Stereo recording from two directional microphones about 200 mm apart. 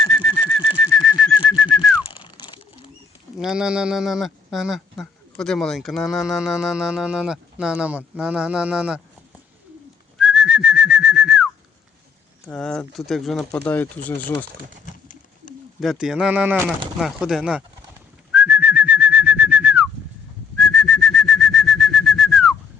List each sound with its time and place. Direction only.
0.0 s pigeon: centre (ahead or behind)
0.8 s whistling: centre (ahead or behind)
3.3 s speech: 5° right (ahead or behind)
10.2 s whistling: 5° right (ahead or behind)
12.5 s speech: 5° left (ahead or behind)
15.0 s bird: 40° left (ahead or behind)
15.8 s speech: centre (ahead or behind)
18.3 s whistling: 10° right (ahead or behind)
20.6 s bird: centre (ahead or behind)